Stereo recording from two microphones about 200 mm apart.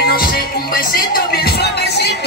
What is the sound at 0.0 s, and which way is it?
Music, 50° left (ahead or behind).